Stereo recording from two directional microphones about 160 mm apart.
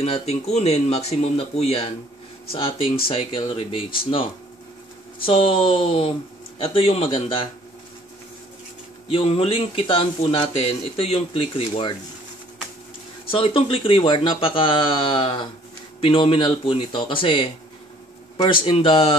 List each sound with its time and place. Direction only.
0.0 s a man's voice: 40° left (ahead or behind)
5.2 s a man's voice: 35° left (ahead or behind)
9.1 s a man's voice: 35° left (ahead or behind)
13.3 s a man's voice: 35° left (ahead or behind)
18.5 s a man's voice: 35° left (ahead or behind)